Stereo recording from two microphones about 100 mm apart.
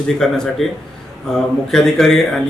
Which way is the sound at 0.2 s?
5° left (ahead or behind).